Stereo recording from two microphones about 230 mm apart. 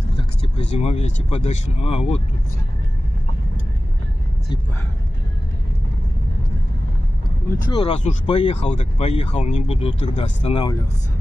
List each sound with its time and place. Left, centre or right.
0.2 s vehicle: left
1.3 s speech: left
7.6 s speech: left